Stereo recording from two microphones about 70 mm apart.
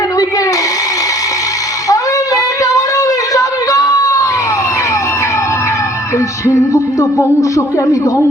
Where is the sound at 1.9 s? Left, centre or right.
Left.